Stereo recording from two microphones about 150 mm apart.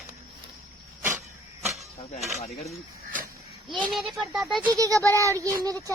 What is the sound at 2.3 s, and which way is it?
Speech, 50° left (ahead or behind).